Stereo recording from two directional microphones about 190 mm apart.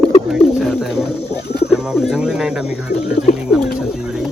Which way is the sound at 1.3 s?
60° left (ahead or behind).